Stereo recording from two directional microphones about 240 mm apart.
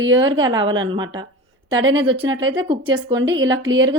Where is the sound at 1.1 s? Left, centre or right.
Centre.